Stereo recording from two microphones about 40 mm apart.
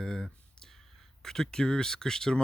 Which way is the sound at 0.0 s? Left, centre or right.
Centre.